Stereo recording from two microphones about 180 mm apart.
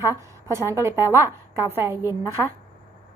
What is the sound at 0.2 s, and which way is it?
A woman's voice, 15° right (ahead or behind).